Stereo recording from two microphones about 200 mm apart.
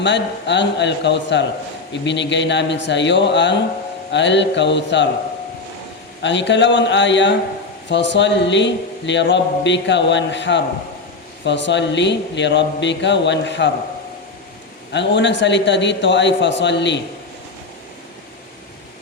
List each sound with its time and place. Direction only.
0.0 s a man's voice: 65° left (ahead or behind)
6.2 s a man's voice: 65° left (ahead or behind)
14.9 s a man's voice: 65° left (ahead or behind)